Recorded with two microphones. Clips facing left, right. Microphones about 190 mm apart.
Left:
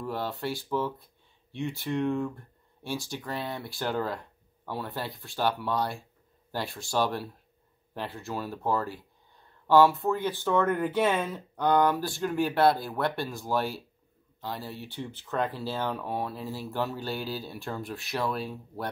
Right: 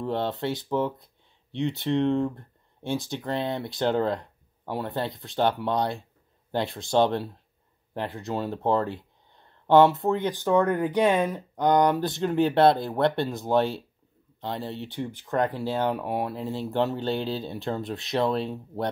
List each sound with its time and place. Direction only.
0.0 s speech: 25° right (ahead or behind)